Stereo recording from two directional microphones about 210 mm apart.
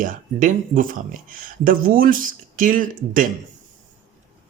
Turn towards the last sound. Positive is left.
turn(degrees=-40)  # may be behind; listen again after turning